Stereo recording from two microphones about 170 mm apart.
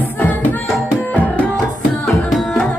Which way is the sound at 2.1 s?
Centre (ahead or behind).